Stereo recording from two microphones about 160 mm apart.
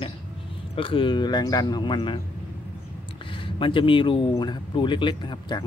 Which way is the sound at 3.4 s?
30° left (ahead or behind).